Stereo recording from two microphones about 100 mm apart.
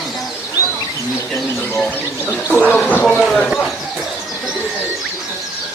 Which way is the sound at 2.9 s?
15° left (ahead or behind).